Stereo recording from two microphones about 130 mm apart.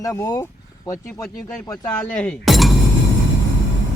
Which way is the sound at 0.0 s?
25° left (ahead or behind).